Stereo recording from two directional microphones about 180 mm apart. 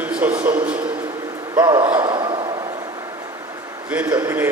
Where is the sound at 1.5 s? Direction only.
20° right (ahead or behind).